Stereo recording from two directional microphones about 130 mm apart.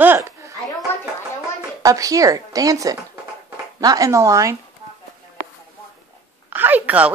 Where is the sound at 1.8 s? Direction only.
25° right (ahead or behind).